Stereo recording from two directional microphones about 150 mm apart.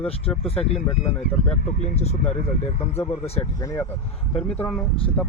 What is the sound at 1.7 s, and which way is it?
Speech, 50° left (ahead or behind).